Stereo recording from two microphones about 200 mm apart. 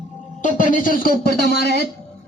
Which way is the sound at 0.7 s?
45° left (ahead or behind).